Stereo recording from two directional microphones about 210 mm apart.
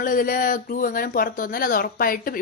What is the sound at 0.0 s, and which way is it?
Speech, 40° left (ahead or behind).